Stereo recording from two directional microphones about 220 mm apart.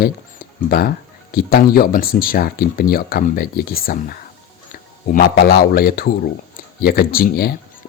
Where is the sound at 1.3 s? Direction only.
45° left (ahead or behind).